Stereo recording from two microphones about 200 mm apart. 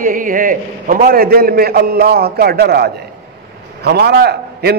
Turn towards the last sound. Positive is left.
turn(degrees=-50)  # may be behind; listen again after turning